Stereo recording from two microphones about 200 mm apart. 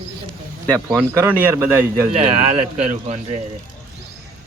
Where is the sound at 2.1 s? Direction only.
30° right (ahead or behind).